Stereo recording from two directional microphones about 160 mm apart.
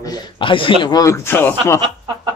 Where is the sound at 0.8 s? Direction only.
20° left (ahead or behind).